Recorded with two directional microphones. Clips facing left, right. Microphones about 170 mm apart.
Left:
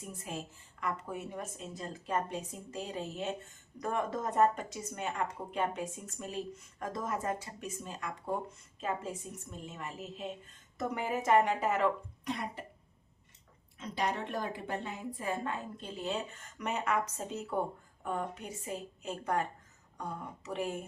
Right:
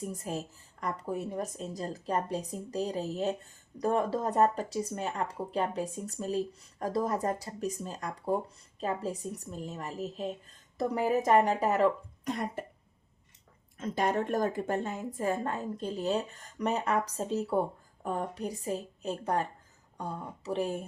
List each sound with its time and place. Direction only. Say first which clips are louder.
0.0 s a woman's voice: right 6 dB; 40° right (ahead or behind)
13.7 s a woman's voice: right 5 dB; 50° right (ahead or behind)